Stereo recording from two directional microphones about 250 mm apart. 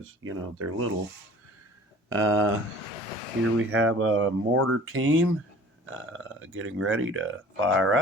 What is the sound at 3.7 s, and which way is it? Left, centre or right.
Speech, right.